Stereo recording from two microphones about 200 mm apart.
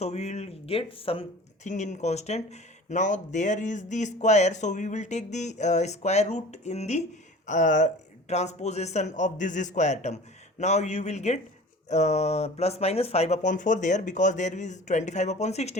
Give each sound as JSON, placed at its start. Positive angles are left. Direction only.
{"t": 0.0, "sound": "speech", "side_deg": 35}